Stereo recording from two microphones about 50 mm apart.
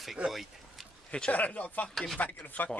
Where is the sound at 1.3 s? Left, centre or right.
Left.